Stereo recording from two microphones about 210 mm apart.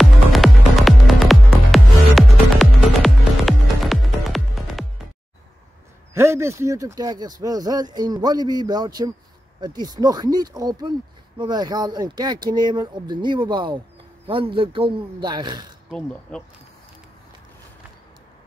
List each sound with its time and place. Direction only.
0.0 s music: centre (ahead or behind)
6.1 s speech: 15° right (ahead or behind)
15.9 s speech: 5° left (ahead or behind)